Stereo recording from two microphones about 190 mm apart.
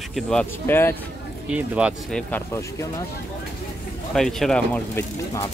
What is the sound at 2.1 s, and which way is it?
Speech, 10° left (ahead or behind).